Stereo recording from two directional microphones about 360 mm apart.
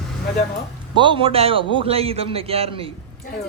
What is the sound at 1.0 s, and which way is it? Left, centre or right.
A man's voice, centre.